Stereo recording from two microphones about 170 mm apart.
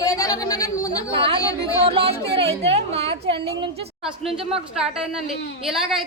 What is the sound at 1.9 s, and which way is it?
A woman's voice, 35° right (ahead or behind).